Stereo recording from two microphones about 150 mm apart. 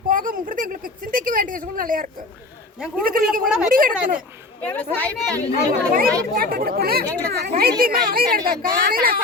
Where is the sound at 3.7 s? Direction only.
70° right (ahead or behind).